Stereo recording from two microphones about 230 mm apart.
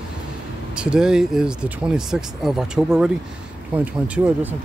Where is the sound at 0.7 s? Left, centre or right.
Centre.